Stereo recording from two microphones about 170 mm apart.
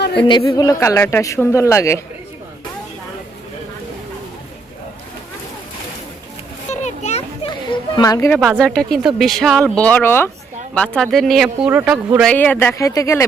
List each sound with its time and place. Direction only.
0.2 s speech: 25° left (ahead or behind)
6.7 s children playing: 45° left (ahead or behind); by 8.3 s 20° left (ahead or behind)
8.3 s speech: centre (ahead or behind)
12.2 s speech: 10° left (ahead or behind)